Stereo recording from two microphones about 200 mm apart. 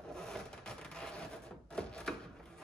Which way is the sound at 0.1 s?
5° left (ahead or behind).